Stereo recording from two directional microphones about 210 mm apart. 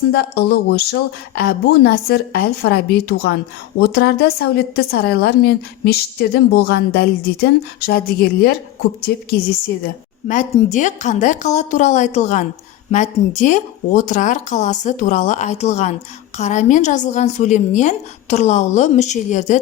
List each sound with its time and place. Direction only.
0.1 s a woman's voice: 50° left (ahead or behind); by 19.6 s 35° left (ahead or behind)